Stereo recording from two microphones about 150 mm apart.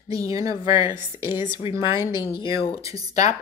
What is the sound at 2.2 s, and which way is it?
Speech, 35° left (ahead or behind).